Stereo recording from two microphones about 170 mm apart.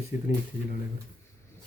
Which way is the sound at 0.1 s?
45° left (ahead or behind).